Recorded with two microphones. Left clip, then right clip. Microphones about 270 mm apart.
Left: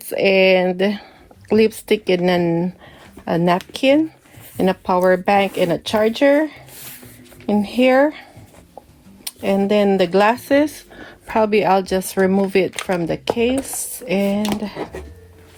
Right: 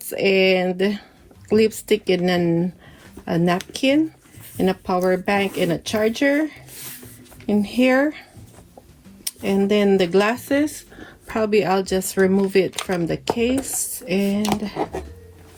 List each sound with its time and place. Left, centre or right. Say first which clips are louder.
0.1 s speech: left 4 dB; left